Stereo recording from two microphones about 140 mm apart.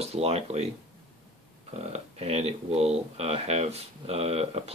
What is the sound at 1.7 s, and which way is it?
Speech, 50° right (ahead or behind).